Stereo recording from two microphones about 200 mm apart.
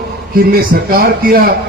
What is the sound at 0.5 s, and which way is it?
Speech, 45° right (ahead or behind).